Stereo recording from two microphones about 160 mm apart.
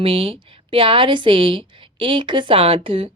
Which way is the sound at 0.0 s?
35° right (ahead or behind).